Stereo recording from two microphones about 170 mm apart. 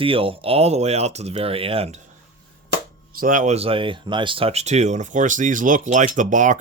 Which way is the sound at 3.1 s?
55° right (ahead or behind).